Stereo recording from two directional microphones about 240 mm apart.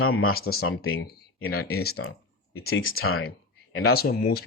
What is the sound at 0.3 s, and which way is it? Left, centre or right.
Speech, left.